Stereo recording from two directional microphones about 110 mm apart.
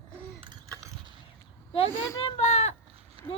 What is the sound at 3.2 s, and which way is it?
Run, 60° right (ahead or behind).